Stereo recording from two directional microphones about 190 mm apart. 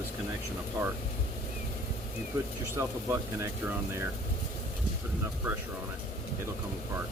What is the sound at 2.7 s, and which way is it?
Speech, 15° right (ahead or behind).